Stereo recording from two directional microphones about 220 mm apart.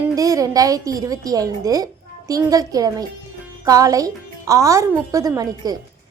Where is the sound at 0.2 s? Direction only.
15° right (ahead or behind).